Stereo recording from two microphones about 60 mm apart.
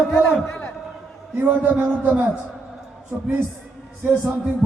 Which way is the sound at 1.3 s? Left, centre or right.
Right.